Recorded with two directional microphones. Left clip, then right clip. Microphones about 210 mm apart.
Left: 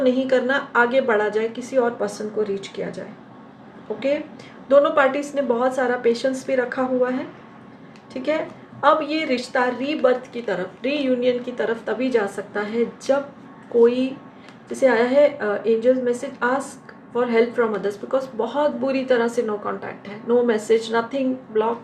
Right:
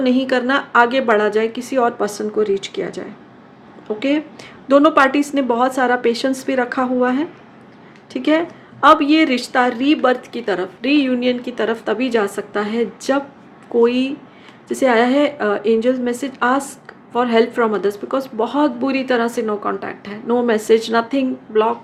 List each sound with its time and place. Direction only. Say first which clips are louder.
0.0 s a woman's voice: right 2 dB; 45° right (ahead or behind)